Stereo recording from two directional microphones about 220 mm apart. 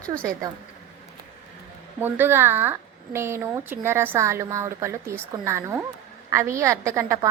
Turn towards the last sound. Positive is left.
turn(degrees=-15)  # may be behind; listen again after turning